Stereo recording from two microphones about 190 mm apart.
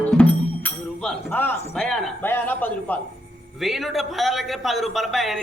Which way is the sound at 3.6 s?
Centre (ahead or behind).